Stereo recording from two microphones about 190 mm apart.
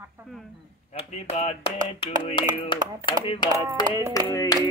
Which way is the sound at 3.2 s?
25° left (ahead or behind).